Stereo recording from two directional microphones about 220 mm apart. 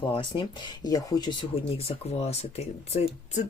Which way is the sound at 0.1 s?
20° left (ahead or behind).